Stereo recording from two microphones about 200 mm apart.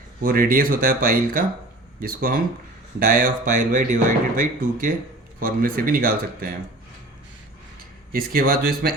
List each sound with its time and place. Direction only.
0.2 s speech: 45° right (ahead or behind)
8.1 s speech: 45° right (ahead or behind)